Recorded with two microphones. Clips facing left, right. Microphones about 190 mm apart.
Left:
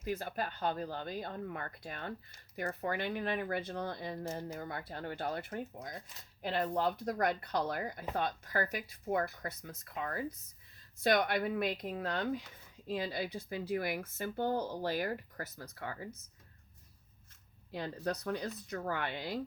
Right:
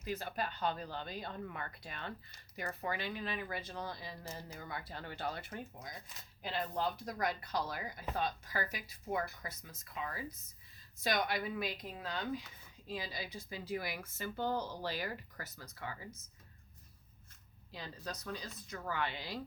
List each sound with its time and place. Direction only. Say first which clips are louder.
0.0 s speech: left 2 dB; 50° left (ahead or behind)
17.7 s speech: left 9 dB; 60° left (ahead or behind)